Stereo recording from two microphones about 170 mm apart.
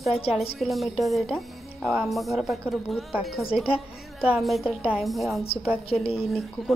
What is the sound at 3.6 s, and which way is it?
Speech, 35° left (ahead or behind).